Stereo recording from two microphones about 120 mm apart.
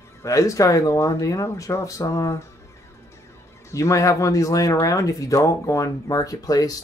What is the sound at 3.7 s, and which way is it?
Speech, 25° left (ahead or behind).